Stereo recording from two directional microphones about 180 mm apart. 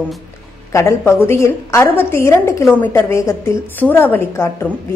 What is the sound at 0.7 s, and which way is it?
A woman's voice, 15° left (ahead or behind).